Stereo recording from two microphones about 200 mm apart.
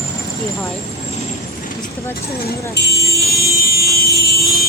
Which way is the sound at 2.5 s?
55° left (ahead or behind).